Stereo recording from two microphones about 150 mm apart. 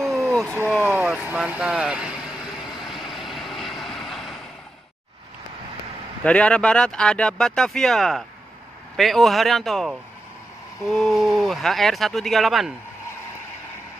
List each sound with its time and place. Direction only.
0.1 s a sound: 20° right (ahead or behind)
0.5 s vehicle: 15° right (ahead or behind); by 4.4 s centre (ahead or behind)
6.2 s speech: 10° left (ahead or behind)